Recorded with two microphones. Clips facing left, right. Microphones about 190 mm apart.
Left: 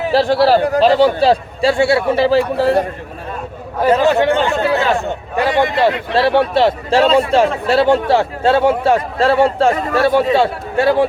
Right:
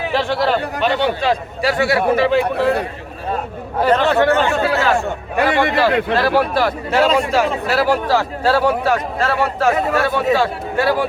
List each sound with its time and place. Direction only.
0.1 s a man's voice: 35° left (ahead or behind)
3.8 s speech: 15° left (ahead or behind)
5.5 s speech: 65° right (ahead or behind)
6.1 s a man's voice: 25° left (ahead or behind)